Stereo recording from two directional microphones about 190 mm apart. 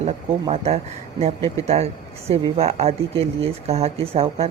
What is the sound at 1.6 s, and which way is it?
A man's voice, 35° right (ahead or behind).